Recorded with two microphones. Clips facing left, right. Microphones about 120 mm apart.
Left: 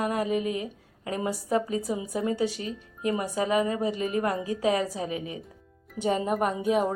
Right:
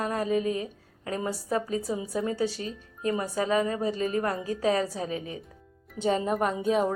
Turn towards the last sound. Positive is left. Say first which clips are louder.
# even
turn(degrees=10)  # may be behind; listen again after turning